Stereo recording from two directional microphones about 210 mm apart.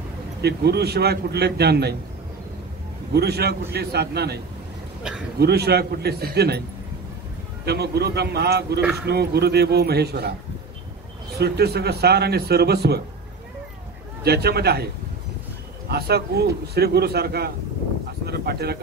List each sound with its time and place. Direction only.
0.4 s speech: 50° right (ahead or behind)
3.1 s speech: 50° right (ahead or behind)
5.4 s speech: 50° right (ahead or behind)
7.6 s speech: 50° right (ahead or behind)
11.3 s speech: 50° right (ahead or behind)
14.2 s speech: 50° right (ahead or behind)
15.9 s speech: 50° right (ahead or behind)